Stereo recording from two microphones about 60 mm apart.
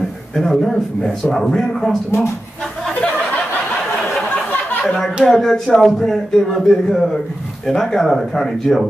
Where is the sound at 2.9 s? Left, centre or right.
Centre.